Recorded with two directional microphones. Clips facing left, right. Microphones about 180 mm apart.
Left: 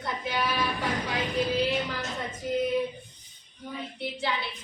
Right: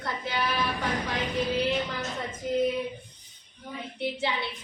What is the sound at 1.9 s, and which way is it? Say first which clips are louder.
Speech: even; centre (ahead or behind).